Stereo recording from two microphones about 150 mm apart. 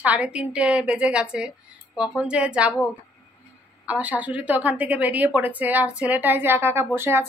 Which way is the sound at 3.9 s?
10° right (ahead or behind).